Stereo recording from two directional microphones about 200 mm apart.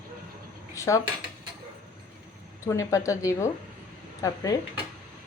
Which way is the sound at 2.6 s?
15° left (ahead or behind).